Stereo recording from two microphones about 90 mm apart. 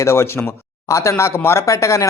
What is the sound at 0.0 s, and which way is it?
Speech, 30° left (ahead or behind).